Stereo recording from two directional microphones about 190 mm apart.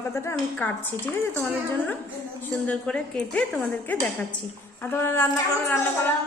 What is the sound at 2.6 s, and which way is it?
Speech, 5° left (ahead or behind).